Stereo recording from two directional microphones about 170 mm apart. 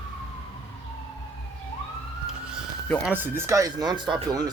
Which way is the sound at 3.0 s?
10° right (ahead or behind).